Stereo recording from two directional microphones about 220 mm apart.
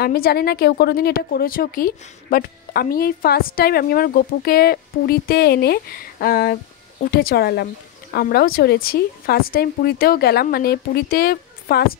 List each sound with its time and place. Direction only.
0.0 s a woman's voice: 45° left (ahead or behind)